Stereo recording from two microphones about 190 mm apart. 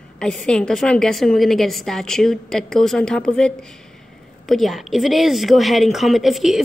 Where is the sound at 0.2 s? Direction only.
Centre (ahead or behind).